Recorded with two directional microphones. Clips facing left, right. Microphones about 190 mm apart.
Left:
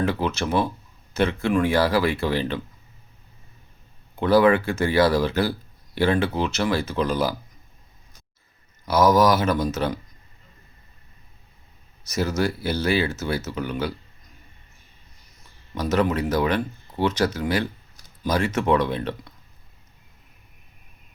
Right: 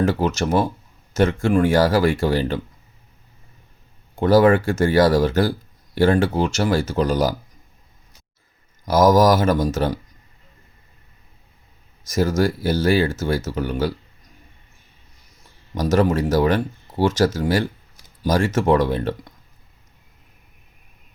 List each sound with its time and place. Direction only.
0.0 s speech: 40° right (ahead or behind)
4.2 s speech: 40° right (ahead or behind)
8.8 s speech: 45° right (ahead or behind)
12.1 s speech: 45° right (ahead or behind)
15.7 s speech: 45° right (ahead or behind)